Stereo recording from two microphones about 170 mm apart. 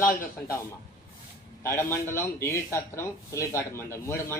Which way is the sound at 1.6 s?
15° left (ahead or behind).